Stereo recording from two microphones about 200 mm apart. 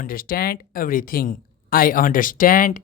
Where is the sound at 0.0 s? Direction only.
45° left (ahead or behind).